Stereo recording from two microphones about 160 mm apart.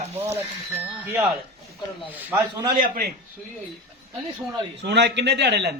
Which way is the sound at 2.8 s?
70° right (ahead or behind).